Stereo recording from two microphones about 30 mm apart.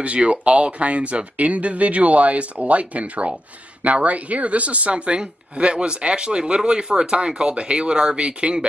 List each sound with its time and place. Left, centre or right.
0.0 s a woman's voice: right